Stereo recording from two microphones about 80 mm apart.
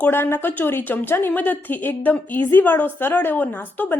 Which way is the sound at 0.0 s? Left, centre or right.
Left.